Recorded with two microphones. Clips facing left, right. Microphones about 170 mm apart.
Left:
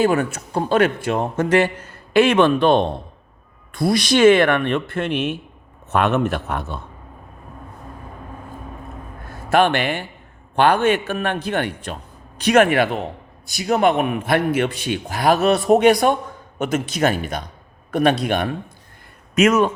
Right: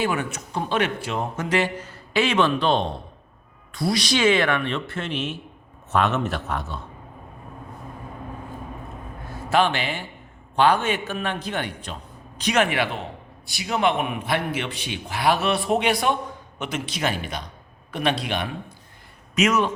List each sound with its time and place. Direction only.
0.0 s a man's voice: 45° left (ahead or behind)
9.5 s a man's voice: 60° left (ahead or behind)